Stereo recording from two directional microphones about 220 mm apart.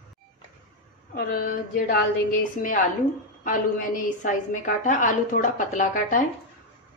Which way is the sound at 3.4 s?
35° left (ahead or behind).